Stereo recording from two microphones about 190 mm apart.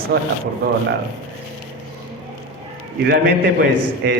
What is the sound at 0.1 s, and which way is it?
Speech, 55° right (ahead or behind).